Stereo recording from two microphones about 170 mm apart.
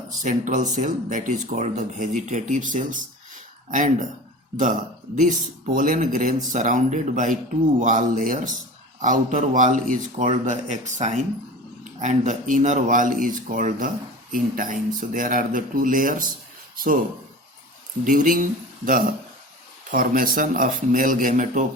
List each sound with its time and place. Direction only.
0.3 s speech: 45° right (ahead or behind)
18.0 s speech: 55° right (ahead or behind)